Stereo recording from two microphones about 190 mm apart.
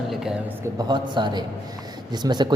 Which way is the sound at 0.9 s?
25° right (ahead or behind).